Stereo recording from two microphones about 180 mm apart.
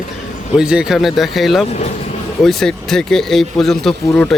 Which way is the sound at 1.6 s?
35° left (ahead or behind).